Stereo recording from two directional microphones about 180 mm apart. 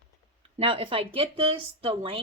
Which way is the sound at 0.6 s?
30° right (ahead or behind).